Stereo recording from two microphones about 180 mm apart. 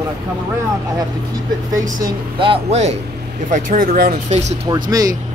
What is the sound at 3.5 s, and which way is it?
Speech, 50° right (ahead or behind).